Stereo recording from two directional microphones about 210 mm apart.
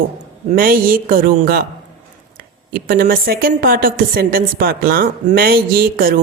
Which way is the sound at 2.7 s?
45° right (ahead or behind).